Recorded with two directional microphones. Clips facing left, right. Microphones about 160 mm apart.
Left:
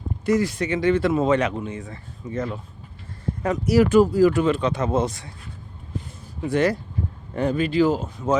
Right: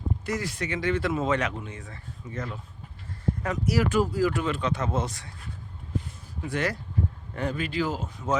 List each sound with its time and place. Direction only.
0.3 s speech: 25° left (ahead or behind)
6.5 s speech: 25° left (ahead or behind)